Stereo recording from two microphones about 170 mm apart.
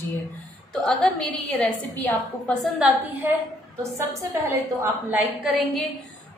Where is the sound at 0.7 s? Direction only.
5° left (ahead or behind).